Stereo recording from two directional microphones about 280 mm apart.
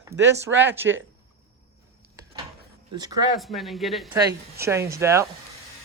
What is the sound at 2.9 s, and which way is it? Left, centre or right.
Speech, centre.